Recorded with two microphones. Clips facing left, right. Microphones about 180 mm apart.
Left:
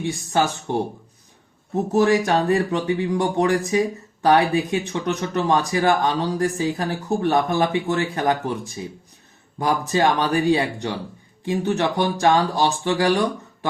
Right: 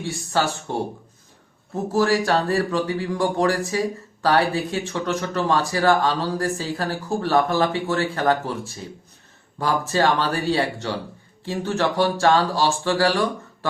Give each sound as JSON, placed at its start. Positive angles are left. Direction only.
{"t": 0.0, "sound": "speech", "side_deg": 20}
{"t": 1.9, "sound": "speech", "side_deg": 20}